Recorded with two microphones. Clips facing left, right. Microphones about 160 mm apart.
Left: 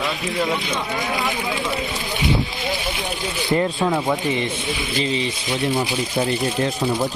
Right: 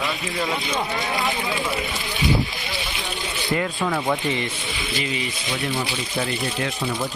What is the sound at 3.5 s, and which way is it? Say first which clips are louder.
Speech: left 4 dB; 25° left (ahead or behind).